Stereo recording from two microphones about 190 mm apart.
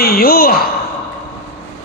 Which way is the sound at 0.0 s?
50° left (ahead or behind).